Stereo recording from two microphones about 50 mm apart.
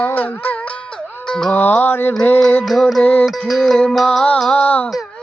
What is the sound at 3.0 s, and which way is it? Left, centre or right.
Music, left.